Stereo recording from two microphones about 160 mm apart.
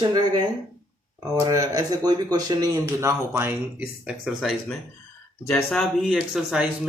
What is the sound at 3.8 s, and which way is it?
Speech, 5° right (ahead or behind).